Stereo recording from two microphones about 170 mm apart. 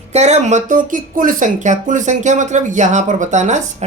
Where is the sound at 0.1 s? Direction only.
40° right (ahead or behind).